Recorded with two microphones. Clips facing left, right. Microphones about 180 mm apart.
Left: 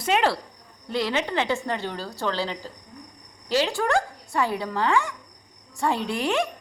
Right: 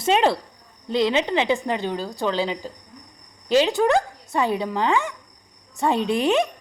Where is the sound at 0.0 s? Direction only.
25° right (ahead or behind).